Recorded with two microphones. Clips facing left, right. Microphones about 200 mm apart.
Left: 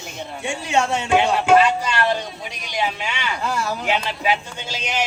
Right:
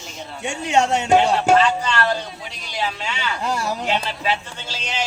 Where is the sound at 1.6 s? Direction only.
10° left (ahead or behind).